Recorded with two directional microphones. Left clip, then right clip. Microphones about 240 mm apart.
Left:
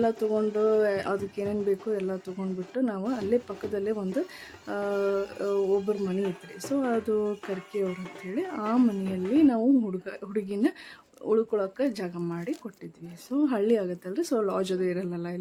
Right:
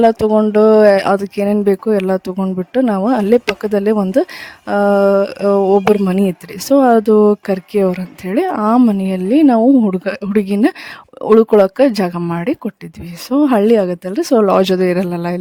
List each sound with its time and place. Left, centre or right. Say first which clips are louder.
0.0 s speech: right 14 dB; right